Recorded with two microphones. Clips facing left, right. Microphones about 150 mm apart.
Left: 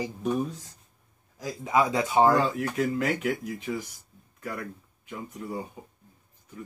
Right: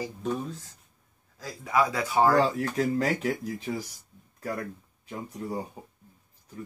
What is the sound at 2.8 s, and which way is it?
Speech, 35° right (ahead or behind).